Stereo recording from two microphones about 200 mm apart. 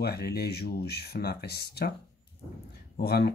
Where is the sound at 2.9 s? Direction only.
50° left (ahead or behind).